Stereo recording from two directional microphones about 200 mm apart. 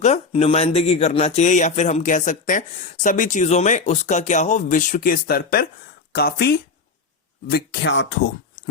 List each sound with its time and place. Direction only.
0.0 s speech: 30° left (ahead or behind); by 8.6 s 60° left (ahead or behind)